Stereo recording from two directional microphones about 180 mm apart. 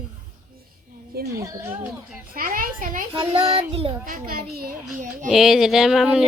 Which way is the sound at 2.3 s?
50° right (ahead or behind).